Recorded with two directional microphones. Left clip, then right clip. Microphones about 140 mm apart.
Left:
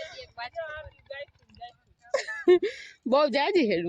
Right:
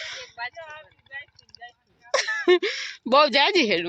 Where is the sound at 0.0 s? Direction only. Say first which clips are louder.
Right 5 dB; 10° left (ahead or behind).